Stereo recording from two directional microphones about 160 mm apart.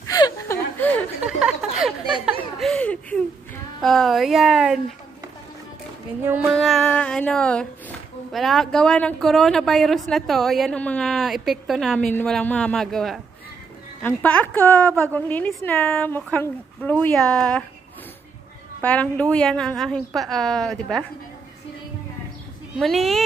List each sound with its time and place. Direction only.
0.0 s chuckle: 20° left (ahead or behind)
1.2 s a sound: 5° right (ahead or behind)
3.8 s speech: centre (ahead or behind)
6.5 s a woman's voice: centre (ahead or behind)
18.8 s a woman's voice: 10° left (ahead or behind)
22.8 s speech: centre (ahead or behind)